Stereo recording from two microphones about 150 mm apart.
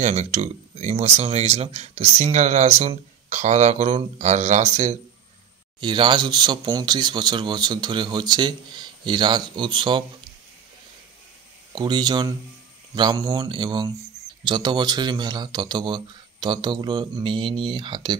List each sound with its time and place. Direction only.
0.0 s speech: 50° right (ahead or behind)
5.8 s speech: 30° right (ahead or behind)
11.7 s speech: 30° right (ahead or behind)